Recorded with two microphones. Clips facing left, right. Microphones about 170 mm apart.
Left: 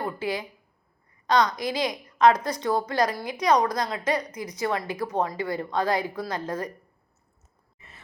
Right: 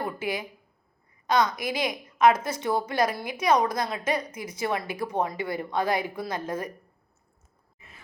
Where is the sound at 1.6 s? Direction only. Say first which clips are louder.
Left 1 dB; 20° right (ahead or behind).